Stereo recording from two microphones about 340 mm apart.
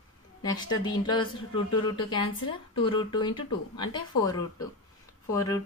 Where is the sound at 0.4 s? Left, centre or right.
Centre.